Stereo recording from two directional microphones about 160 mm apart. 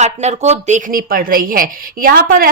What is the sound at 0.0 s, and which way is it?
A woman's voice, 45° right (ahead or behind).